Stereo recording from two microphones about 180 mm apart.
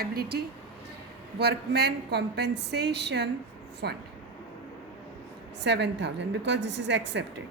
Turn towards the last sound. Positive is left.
turn(degrees=-75)  # may be behind; listen again after turning